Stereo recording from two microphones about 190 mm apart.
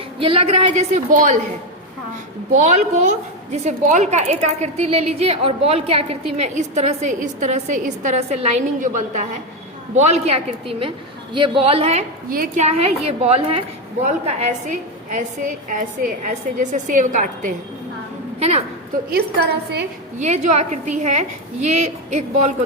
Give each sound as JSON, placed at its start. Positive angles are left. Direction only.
{"t": 0.2, "sound": "a woman's voice", "side_deg": -30}
{"t": 2.6, "sound": "a woman's voice", "side_deg": -35}
{"t": 12.3, "sound": "a woman's voice", "side_deg": -45}
{"t": 19.1, "sound": "a woman's voice", "side_deg": -55}
{"t": 20.1, "sound": "a woman's voice", "side_deg": -40}